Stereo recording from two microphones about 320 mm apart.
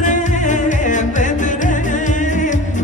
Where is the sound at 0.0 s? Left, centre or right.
Left.